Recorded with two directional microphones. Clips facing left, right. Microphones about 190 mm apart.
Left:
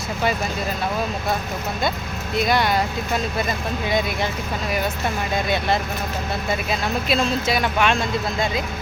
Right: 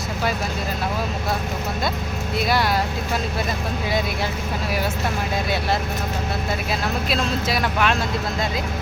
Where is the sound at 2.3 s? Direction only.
5° right (ahead or behind).